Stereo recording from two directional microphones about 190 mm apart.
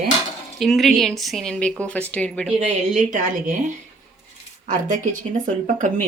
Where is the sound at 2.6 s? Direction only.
40° right (ahead or behind).